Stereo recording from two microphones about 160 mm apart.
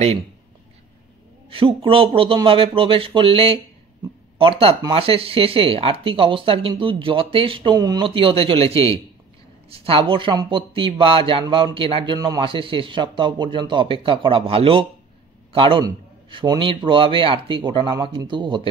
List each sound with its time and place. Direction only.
1.5 s speech: 35° right (ahead or behind)